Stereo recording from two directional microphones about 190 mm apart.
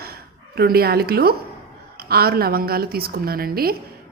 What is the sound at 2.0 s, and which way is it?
A woman's voice, 55° right (ahead or behind).